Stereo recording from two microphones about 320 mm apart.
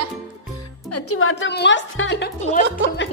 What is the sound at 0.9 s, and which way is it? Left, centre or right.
A woman's voice, left.